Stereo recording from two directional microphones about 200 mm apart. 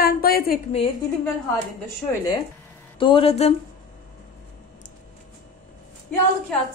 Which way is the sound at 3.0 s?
25° left (ahead or behind).